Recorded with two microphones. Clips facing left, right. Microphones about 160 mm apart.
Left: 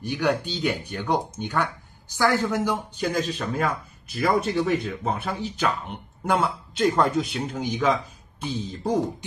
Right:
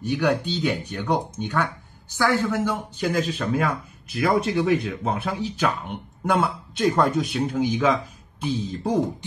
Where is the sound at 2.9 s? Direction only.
5° right (ahead or behind).